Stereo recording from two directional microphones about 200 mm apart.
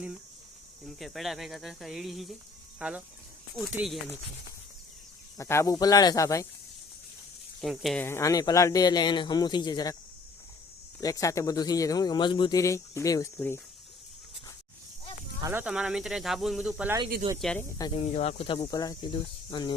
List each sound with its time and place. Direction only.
0.9 s speech: centre (ahead or behind)
5.4 s speech: 15° left (ahead or behind)
7.6 s speech: centre (ahead or behind)
8.0 s speech: 15° left (ahead or behind)
11.0 s speech: 15° left (ahead or behind)
15.4 s speech: 10° right (ahead or behind)
17.4 s speech: 5° left (ahead or behind)
17.7 s speech: 20° left (ahead or behind)
18.0 s speech: 30° left (ahead or behind)